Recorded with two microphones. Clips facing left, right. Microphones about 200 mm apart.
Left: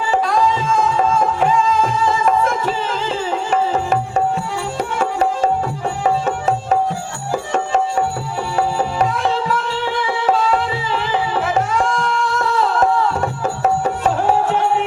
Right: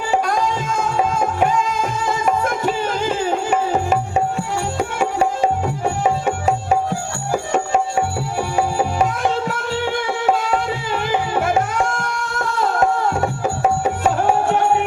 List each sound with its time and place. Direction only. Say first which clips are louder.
2.0 s music: left 3 dB; 45° right (ahead or behind)
4.8 s music: left 1 dB; 10° right (ahead or behind)
8.5 s music: left 1 dB; 10° right (ahead or behind)
9.5 s music: left 1 dB; 50° right (ahead or behind)
13.4 s music: left 1 dB; 10° right (ahead or behind)
14.5 s music: even; 45° right (ahead or behind)